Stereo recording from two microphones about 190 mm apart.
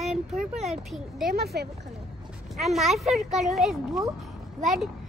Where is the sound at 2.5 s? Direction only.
Centre (ahead or behind).